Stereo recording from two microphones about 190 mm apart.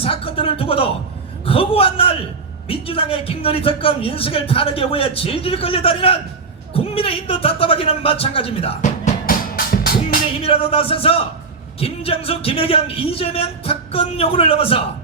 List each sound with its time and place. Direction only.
0.0 s a man's voice: 30° left (ahead or behind)
6.7 s a sound: 30° left (ahead or behind); by 10.2 s 50° left (ahead or behind)
10.4 s a man's voice: 30° left (ahead or behind)